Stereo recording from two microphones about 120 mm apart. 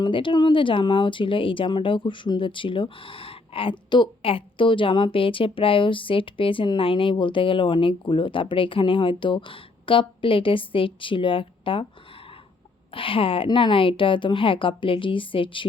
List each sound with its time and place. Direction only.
0.0 s speech: 40° left (ahead or behind)
12.9 s speech: 45° left (ahead or behind)